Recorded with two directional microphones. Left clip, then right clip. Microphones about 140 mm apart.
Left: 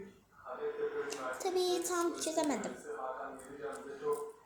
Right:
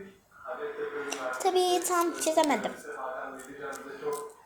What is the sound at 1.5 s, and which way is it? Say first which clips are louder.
A child's voice: right 8 dB; 25° right (ahead or behind).